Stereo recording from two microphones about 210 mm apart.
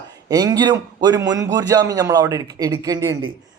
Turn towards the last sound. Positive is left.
turn(degrees=-20)  # may be behind; listen again after turning